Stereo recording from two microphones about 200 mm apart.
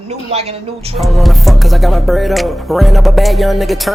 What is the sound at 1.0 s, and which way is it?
Speech, centre (ahead or behind).